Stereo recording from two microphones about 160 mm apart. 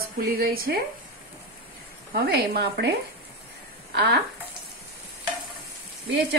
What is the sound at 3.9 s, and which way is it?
Speech, 85° right.